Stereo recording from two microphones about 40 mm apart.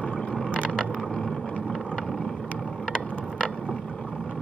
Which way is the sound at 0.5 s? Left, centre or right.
Left.